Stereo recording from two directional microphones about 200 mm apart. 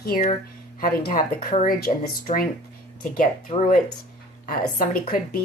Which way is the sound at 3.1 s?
40° left (ahead or behind).